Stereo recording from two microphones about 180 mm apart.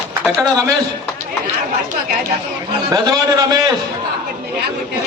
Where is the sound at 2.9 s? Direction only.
20° right (ahead or behind).